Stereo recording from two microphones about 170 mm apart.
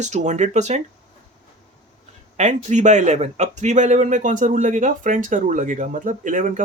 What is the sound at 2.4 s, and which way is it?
Speech, 45° right (ahead or behind).